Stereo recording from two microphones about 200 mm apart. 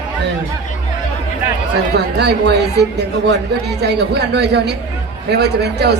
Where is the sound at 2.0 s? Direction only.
55° right (ahead or behind).